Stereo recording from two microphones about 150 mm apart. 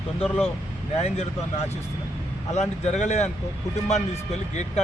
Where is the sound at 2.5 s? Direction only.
50° left (ahead or behind).